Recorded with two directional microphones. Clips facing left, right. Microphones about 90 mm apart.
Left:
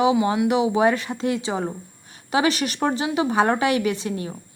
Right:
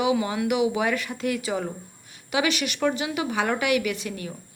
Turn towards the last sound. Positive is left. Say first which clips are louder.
# left 5 dB
turn(degrees=30)  # may be behind; listen again after turning